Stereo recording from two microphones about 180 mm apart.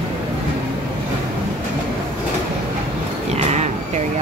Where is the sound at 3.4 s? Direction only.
40° right (ahead or behind).